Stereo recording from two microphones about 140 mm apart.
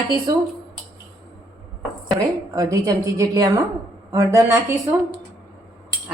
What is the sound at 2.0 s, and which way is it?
A woman's voice, 25° right (ahead or behind).